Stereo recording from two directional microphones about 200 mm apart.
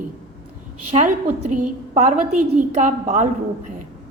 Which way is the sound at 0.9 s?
40° right (ahead or behind).